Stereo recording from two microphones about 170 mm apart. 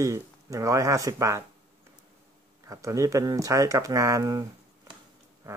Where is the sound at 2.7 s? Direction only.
20° right (ahead or behind).